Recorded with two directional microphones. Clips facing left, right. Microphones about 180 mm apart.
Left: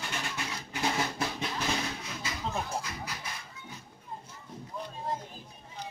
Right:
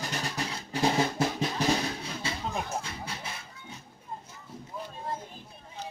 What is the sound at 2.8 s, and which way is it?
Music, 30° right (ahead or behind).